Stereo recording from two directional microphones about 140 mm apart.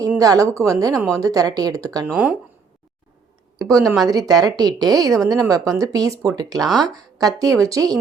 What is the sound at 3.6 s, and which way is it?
Speech, 25° right (ahead or behind).